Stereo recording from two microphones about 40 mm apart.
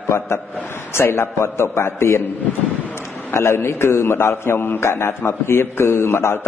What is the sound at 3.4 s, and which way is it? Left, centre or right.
A man's voice, left.